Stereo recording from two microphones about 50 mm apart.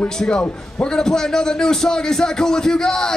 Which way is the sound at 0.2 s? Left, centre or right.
Left.